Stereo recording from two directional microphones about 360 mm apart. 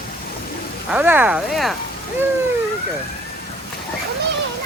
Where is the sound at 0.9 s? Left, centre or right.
Centre.